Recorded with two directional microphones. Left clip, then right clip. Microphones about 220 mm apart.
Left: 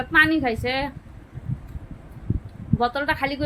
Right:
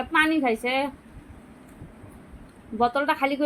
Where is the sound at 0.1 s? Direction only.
Centre (ahead or behind).